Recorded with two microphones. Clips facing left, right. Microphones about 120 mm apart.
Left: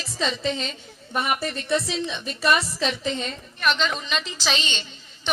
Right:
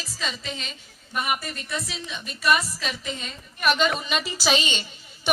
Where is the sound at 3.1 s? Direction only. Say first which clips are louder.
Left 6 dB; 5° right (ahead or behind).